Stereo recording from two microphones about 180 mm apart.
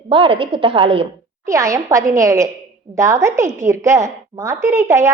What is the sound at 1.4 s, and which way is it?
A woman's voice, 15° right (ahead or behind).